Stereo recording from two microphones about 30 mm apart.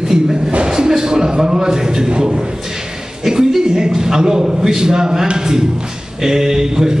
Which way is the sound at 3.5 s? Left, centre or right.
Centre.